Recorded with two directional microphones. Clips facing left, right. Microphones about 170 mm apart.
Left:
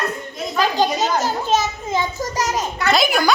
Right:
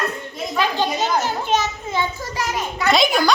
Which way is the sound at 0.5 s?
40° left (ahead or behind).